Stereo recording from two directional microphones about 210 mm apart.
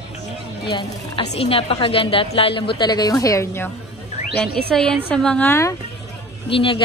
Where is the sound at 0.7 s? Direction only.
25° left (ahead or behind).